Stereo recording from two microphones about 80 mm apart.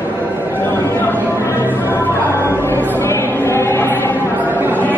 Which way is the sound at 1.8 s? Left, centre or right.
Left.